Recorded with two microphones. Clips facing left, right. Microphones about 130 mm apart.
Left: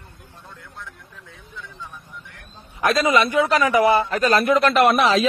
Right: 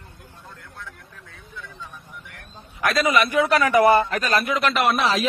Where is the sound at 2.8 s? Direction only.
25° left (ahead or behind).